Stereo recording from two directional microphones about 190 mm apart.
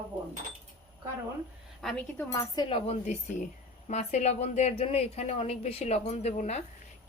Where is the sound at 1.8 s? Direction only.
5° left (ahead or behind).